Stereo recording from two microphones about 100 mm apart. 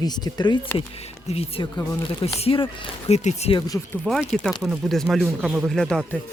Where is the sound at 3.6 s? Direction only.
40° left (ahead or behind).